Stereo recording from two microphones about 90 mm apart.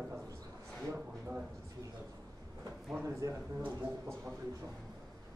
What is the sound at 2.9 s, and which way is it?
Speech, 30° right (ahead or behind).